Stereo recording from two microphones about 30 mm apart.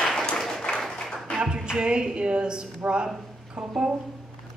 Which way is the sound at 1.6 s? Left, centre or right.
Right.